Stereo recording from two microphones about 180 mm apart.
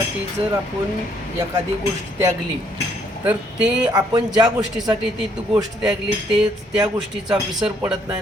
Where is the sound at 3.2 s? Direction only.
5° right (ahead or behind).